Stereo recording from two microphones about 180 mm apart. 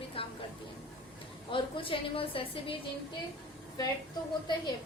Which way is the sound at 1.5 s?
30° left (ahead or behind).